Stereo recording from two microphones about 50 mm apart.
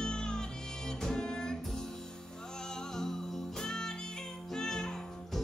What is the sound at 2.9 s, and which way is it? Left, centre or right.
Music, centre.